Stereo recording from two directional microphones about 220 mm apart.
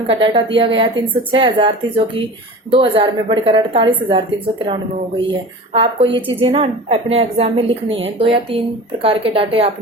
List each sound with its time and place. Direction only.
0.1 s a woman's voice: 20° right (ahead or behind)